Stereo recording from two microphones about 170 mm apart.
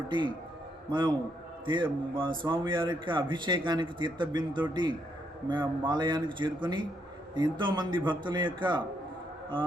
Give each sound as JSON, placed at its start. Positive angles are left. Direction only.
{"t": 0.9, "sound": "a man's voice", "side_deg": -25}